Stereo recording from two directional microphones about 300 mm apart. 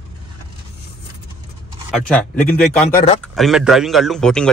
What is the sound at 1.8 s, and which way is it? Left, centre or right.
A man's voice, centre.